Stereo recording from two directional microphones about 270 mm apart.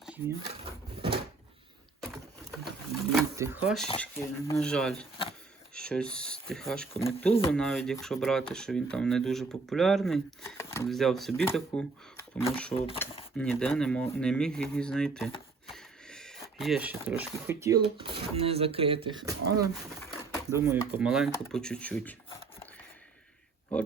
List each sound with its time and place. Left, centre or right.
2.6 s sewing machine: centre
3.3 s speech: centre
4.0 s speech: centre
12.7 s speech: centre
13.3 s speech: centre
15.7 s a sound: centre
17.4 s speech: centre